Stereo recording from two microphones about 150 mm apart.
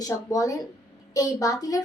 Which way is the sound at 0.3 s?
20° left (ahead or behind).